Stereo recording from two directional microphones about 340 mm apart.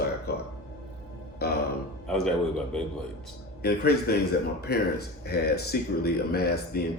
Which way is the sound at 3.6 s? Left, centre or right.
Left.